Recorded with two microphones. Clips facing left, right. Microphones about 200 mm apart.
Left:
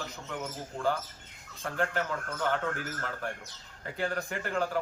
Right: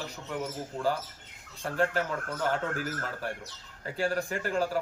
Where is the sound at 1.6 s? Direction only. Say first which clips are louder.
Right 3 dB; 35° right (ahead or behind).